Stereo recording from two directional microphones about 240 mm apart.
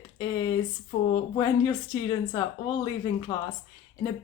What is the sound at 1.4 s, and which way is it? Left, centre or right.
Speech, centre.